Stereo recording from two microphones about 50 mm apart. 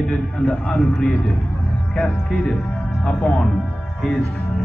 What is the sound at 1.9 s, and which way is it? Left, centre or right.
Music, centre.